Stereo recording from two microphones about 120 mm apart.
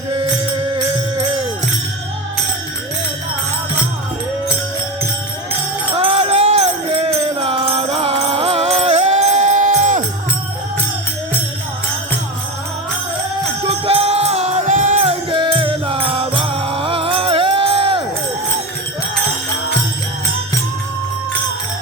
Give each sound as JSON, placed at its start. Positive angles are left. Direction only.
{"t": 0.1, "sound": "music", "side_deg": -45}
{"t": 6.0, "sound": "music", "side_deg": -55}
{"t": 13.7, "sound": "music", "side_deg": -55}